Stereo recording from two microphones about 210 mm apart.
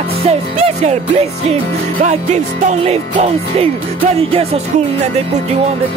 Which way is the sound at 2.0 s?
30° right (ahead or behind).